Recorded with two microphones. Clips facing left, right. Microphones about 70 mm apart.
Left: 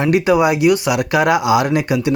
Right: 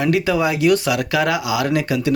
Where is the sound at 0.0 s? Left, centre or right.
Left.